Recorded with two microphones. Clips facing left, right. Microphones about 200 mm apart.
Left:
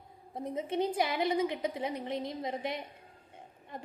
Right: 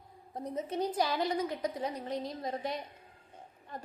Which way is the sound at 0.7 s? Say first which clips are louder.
Left 1 dB; 25° left (ahead or behind).